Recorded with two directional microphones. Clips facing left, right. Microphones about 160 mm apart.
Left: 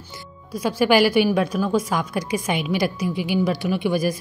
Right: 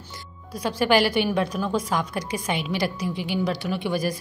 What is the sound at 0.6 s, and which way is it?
A woman's voice, 10° left (ahead or behind).